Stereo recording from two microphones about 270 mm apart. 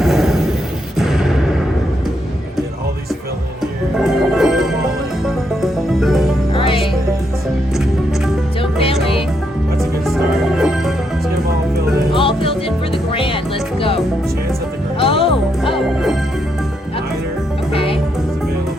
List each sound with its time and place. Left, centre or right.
0.0 s a sound: centre
3.9 s music: centre
6.0 s music: centre
6.5 s music: centre
8.6 s music: left
9.8 s music: centre
12.1 s music: centre
17.7 s music: left